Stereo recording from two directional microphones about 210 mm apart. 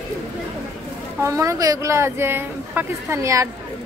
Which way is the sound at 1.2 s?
15° right (ahead or behind).